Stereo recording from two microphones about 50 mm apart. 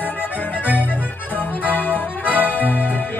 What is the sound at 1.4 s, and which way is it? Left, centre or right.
Music, left.